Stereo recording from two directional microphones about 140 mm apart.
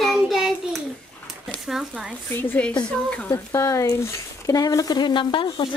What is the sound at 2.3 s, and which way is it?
Speech, 15° left (ahead or behind).